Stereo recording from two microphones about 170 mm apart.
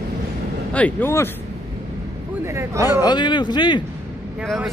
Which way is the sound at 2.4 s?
15° right (ahead or behind).